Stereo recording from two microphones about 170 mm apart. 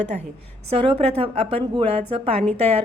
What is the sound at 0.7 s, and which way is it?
A woman's voice, 30° right (ahead or behind).